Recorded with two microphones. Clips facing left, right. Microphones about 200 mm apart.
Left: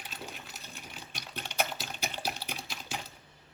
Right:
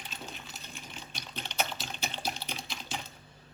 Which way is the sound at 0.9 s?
10° left (ahead or behind).